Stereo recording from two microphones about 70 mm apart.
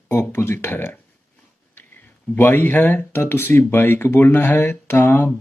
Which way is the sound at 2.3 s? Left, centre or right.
Left.